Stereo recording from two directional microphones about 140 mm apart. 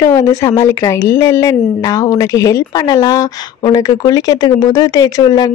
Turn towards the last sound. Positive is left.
turn(degrees=30)  # may be behind; listen again after turning